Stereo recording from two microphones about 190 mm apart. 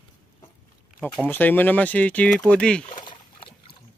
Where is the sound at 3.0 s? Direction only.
25° left (ahead or behind).